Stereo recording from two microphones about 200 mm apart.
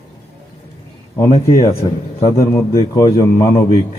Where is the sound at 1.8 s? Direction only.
15° left (ahead or behind).